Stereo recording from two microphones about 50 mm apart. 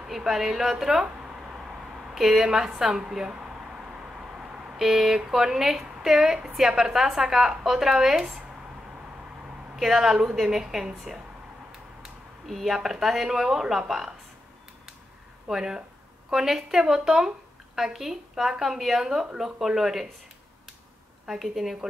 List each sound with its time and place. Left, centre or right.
0.0 s a woman's voice: centre
1.0 s a sound: centre
2.0 s a woman's voice: centre
9.8 s a woman's voice: centre
12.4 s a woman's voice: centre
15.4 s a woman's voice: centre
21.3 s a woman's voice: centre